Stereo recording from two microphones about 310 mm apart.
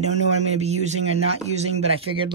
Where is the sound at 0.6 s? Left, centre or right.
Right.